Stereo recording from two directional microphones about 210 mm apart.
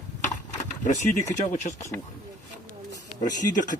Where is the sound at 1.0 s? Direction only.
15° left (ahead or behind).